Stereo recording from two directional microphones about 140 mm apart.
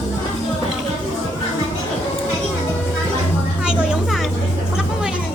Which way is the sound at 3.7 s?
5° right (ahead or behind).